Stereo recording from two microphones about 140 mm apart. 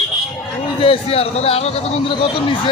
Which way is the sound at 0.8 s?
45° left (ahead or behind).